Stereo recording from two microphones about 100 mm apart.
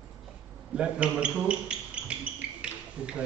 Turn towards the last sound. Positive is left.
turn(degrees=-10)  # may be behind; listen again after turning